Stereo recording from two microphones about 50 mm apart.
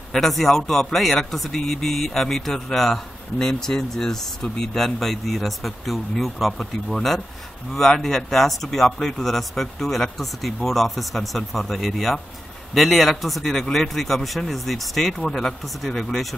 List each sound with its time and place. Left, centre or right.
0.1 s a man's voice: centre